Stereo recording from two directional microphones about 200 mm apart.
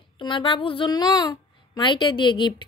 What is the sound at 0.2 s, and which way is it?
Speech, 25° left (ahead or behind).